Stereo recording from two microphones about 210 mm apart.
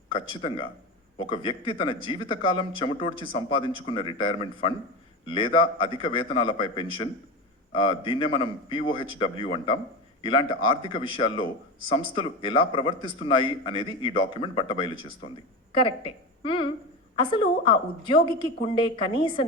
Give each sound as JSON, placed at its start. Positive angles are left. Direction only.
{"t": 0.1, "sound": "a woman's voice", "side_deg": 25}